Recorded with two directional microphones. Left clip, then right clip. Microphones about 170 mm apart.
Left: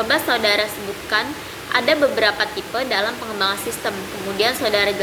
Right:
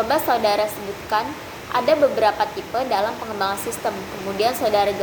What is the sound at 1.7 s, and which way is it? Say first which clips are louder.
A woman's voice: even; 10° left (ahead or behind).